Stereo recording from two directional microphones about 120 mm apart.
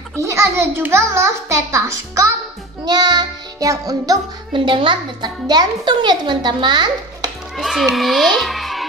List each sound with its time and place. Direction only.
0.2 s a child's voice: 25° right (ahead or behind)
2.8 s music: 35° right (ahead or behind)
4.6 s a child's voice: 45° right (ahead or behind)
7.5 s a child's voice: centre (ahead or behind)